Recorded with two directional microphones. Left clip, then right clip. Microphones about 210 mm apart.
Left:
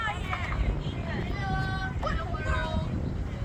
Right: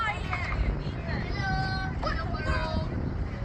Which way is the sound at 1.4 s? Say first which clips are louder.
Right 2 dB; 5° left (ahead or behind).